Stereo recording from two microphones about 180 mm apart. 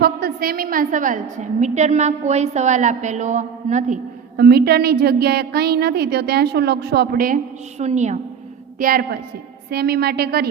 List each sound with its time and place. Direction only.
0.0 s a woman's voice: 60° right (ahead or behind)
7.8 s a woman's voice: 40° right (ahead or behind)
8.8 s a woman's voice: 55° right (ahead or behind)